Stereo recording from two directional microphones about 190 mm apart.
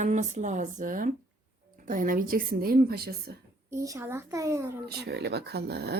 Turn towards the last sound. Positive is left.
turn(degrees=-60)  # may be behind; listen again after turning